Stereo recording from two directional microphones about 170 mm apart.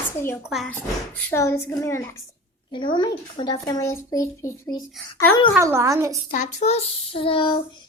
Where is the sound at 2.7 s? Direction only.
25° left (ahead or behind).